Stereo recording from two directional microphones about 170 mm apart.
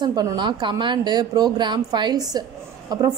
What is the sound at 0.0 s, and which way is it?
A woman's voice, 25° right (ahead or behind).